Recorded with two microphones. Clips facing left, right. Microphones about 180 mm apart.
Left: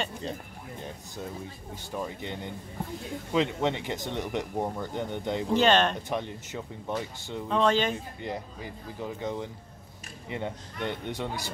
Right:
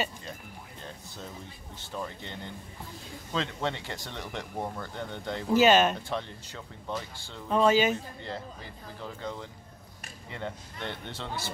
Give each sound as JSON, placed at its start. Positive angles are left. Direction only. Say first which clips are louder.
{"t": 0.7, "sound": "speech", "louder": "left 6 dB", "side_deg": 15}
{"t": 5.5, "sound": "speech", "louder": "right 2 dB", "side_deg": -5}
{"t": 6.0, "sound": "speech", "louder": "left 3 dB", "side_deg": 20}
{"t": 7.4, "sound": "speech", "louder": "right 2 dB", "side_deg": -5}
{"t": 8.2, "sound": "speech", "louder": "left 3 dB", "side_deg": 15}